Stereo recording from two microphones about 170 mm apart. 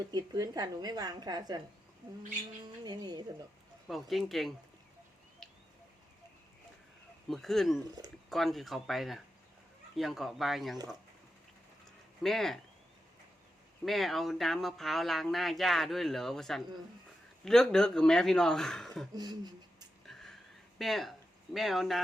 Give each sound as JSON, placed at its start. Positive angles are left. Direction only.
{"t": 0.1, "sound": "a woman's voice", "side_deg": -25}
{"t": 2.8, "sound": "a woman's voice", "side_deg": -25}
{"t": 3.8, "sound": "speech", "side_deg": 0}
{"t": 5.4, "sound": "a sound", "side_deg": 5}
{"t": 7.3, "sound": "speech", "side_deg": 0}
{"t": 12.2, "sound": "speech", "side_deg": 0}
{"t": 13.8, "sound": "speech", "side_deg": 0}
{"t": 19.1, "sound": "a woman's voice", "side_deg": -25}
{"t": 20.1, "sound": "a sound", "side_deg": 0}